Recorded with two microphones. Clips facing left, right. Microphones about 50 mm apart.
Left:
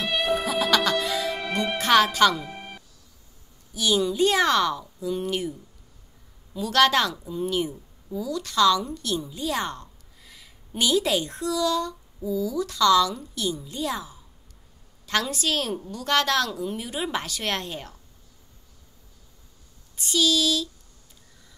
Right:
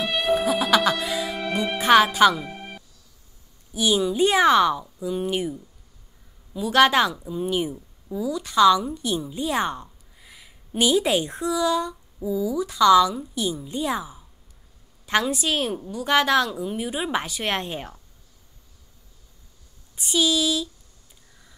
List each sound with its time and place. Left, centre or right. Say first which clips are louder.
0.0 s music: right 3 dB; centre
1.9 s speech: right 3 dB; centre
3.7 s a woman's voice: right 2 dB; centre
20.0 s a woman's voice: right 1 dB; centre